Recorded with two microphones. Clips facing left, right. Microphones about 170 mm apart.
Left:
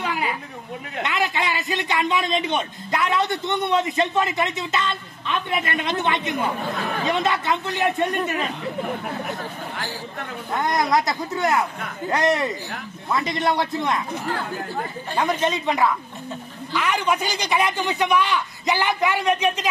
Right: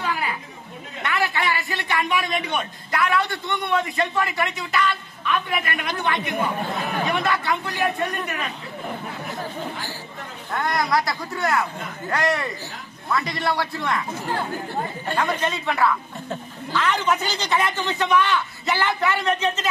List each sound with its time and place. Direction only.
0.0 s a sound: 20° left (ahead or behind)
1.0 s a man's voice: 20° left (ahead or behind)
10.5 s a man's voice: 20° left (ahead or behind)
15.1 s a man's voice: 20° left (ahead or behind)